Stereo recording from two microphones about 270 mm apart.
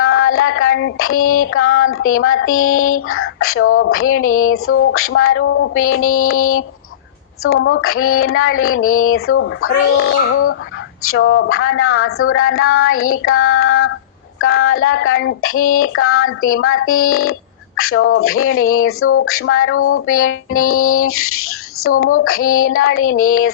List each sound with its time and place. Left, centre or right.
0.0 s female singing: left